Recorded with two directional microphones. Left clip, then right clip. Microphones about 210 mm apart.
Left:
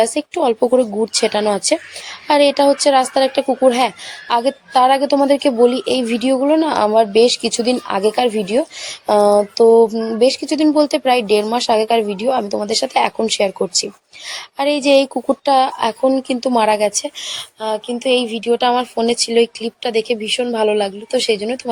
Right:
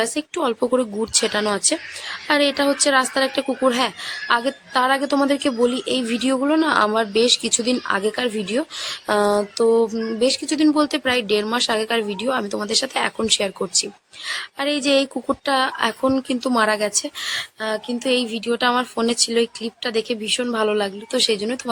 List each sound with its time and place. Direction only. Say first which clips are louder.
0.0 s speech: left 6 dB; 5° left (ahead or behind)